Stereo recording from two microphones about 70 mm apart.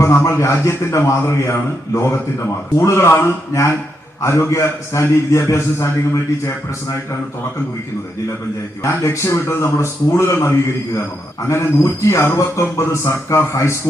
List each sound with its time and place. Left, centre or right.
0.3 s a man's voice: left
8.8 s a man's voice: left